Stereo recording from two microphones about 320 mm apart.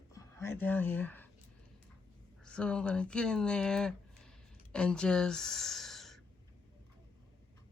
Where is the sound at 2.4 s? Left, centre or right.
Centre.